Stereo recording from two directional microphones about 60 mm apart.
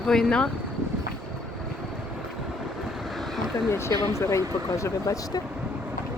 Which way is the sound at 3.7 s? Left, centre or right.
Left.